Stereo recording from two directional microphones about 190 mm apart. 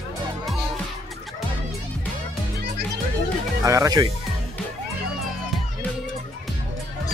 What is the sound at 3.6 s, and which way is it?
Speech, 15° right (ahead or behind).